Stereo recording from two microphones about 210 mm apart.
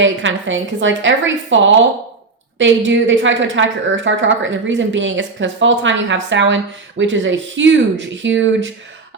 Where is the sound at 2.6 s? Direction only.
60° right (ahead or behind).